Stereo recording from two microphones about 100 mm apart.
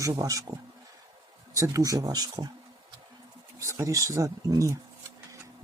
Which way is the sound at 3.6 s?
30° right (ahead or behind).